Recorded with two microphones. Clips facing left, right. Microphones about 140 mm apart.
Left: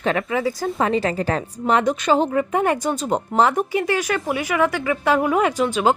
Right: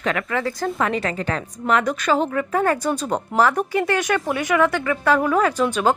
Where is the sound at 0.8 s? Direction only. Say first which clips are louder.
Left 5 dB; 30° left (ahead or behind).